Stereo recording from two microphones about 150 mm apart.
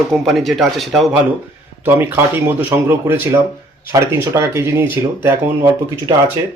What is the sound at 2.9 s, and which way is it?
Speech, 15° right (ahead or behind).